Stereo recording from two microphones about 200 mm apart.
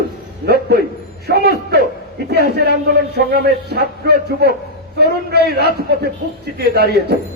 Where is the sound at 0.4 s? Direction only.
50° right (ahead or behind).